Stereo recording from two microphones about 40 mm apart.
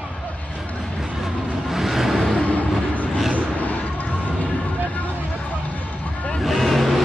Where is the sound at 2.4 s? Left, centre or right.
Left.